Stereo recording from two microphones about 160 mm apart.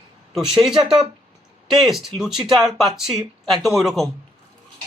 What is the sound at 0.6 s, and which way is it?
A man's voice, 5° right (ahead or behind).